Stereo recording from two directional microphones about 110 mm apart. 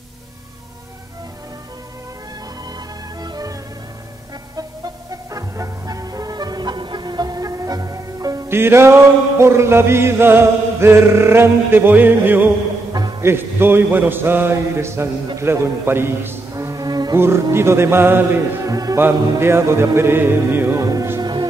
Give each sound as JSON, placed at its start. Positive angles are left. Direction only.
{"t": 3.2, "sound": "music", "side_deg": -35}
{"t": 5.1, "sound": "music", "side_deg": -30}
{"t": 8.5, "sound": "music", "side_deg": -20}
{"t": 9.4, "sound": "chant", "side_deg": -25}
{"t": 15.3, "sound": "music", "side_deg": -25}
{"t": 17.2, "sound": "chant", "side_deg": -25}
{"t": 18.9, "sound": "chant", "side_deg": -20}
{"t": 20.8, "sound": "music", "side_deg": -30}